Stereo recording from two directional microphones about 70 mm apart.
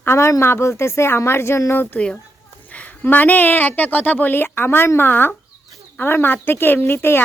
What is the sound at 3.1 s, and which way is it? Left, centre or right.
A woman's voice, left.